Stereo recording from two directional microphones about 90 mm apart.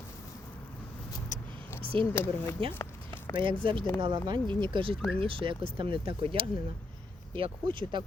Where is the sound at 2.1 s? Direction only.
25° left (ahead or behind).